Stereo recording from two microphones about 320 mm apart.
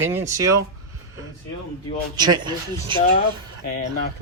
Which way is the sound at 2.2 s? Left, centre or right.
Centre.